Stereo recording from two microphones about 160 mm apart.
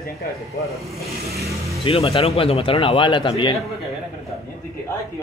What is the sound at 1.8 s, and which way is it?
Speech, 35° left (ahead or behind).